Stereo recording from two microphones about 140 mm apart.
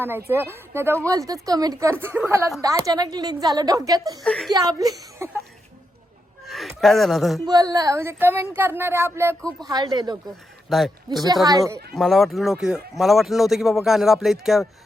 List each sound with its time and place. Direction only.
0.3 s a woman's voice: 15° right (ahead or behind)
4.2 s speech: 5° left (ahead or behind)
4.5 s a woman's voice: 25° right (ahead or behind)
6.4 s a sound: centre (ahead or behind)
7.4 s speech: 25° right (ahead or behind)
9.4 s speech: 5° left (ahead or behind)
9.6 s a woman's voice: 30° right (ahead or behind)
10.7 s speech: centre (ahead or behind)